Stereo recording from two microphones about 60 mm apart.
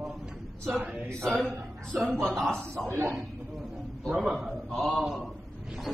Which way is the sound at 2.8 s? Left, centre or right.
Right.